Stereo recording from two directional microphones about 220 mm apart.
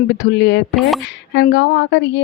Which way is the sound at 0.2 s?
50° left (ahead or behind).